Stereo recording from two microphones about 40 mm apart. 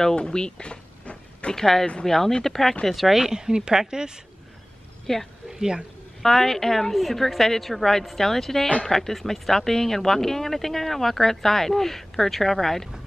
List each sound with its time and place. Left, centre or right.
0.1 s a sound: left
1.5 s speech: centre
5.0 s speech: centre
5.5 s speech: centre
6.2 s speech: centre